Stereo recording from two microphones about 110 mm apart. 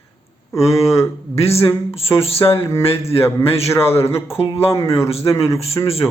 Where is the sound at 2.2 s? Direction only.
60° left (ahead or behind).